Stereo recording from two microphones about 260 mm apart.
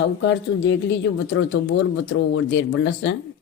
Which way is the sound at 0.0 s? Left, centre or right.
Left.